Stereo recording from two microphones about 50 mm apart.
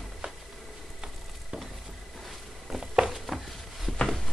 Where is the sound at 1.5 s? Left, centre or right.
Right.